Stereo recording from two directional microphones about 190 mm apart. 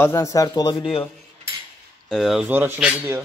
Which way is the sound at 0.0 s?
15° left (ahead or behind).